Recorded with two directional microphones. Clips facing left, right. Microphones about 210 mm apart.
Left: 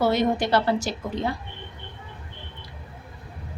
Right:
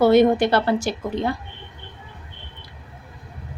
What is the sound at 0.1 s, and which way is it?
Speech, 55° right (ahead or behind).